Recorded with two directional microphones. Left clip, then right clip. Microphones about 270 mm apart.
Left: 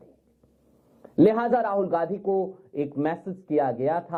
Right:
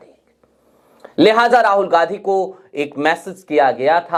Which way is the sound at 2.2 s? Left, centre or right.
Right.